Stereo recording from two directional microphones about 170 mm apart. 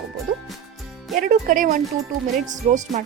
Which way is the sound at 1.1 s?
55° right (ahead or behind).